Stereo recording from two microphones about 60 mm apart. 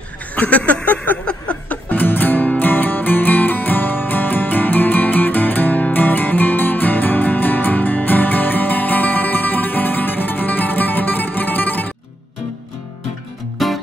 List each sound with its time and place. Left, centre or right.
0.4 s a sound: left
1.9 s music: left
13.6 s music: centre